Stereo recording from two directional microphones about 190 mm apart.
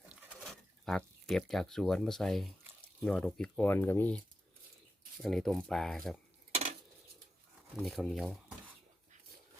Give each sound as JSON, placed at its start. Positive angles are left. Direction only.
{"t": 0.1, "sound": "a sound", "side_deg": -5}
{"t": 3.0, "sound": "speech", "side_deg": 5}
{"t": 5.2, "sound": "speech", "side_deg": 0}
{"t": 6.5, "sound": "cutlery", "side_deg": -35}
{"t": 7.8, "sound": "speech", "side_deg": 0}